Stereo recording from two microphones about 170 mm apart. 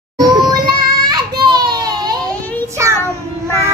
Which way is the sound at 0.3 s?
25° right (ahead or behind).